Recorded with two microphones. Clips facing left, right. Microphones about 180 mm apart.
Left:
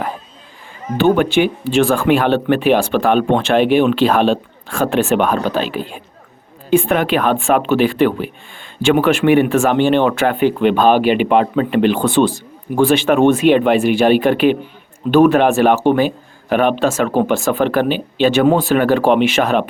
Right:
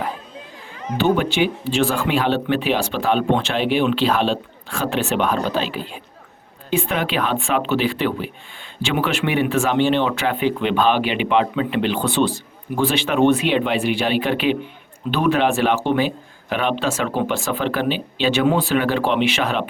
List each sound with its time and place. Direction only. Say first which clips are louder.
0.9 s speech: left 5 dB; 55° left (ahead or behind)